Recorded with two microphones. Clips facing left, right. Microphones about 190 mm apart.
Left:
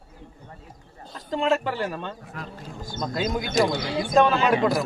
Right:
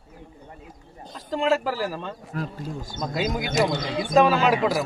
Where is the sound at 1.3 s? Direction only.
Centre (ahead or behind).